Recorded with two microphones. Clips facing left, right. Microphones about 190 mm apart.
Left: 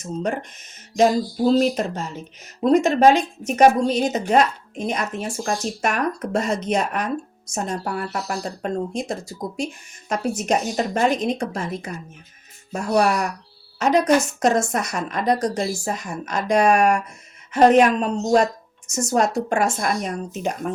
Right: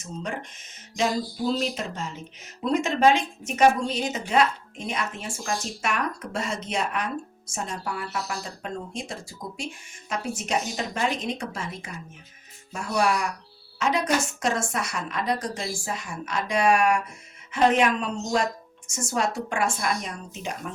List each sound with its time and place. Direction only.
0.9 s a woman's voice: 45° left (ahead or behind)